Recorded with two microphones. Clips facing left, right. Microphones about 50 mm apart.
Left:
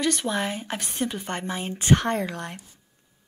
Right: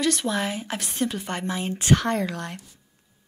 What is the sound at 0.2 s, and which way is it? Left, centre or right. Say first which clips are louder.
Speech: right 1 dB; centre.